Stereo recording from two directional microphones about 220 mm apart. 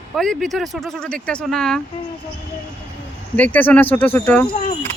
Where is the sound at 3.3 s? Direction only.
5° left (ahead or behind).